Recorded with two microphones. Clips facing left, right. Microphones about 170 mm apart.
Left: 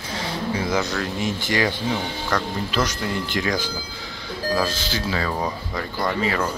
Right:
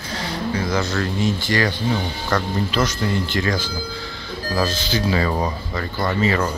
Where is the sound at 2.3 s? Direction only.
10° right (ahead or behind).